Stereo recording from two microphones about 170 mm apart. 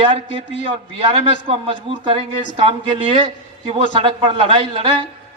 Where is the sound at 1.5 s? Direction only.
30° right (ahead or behind).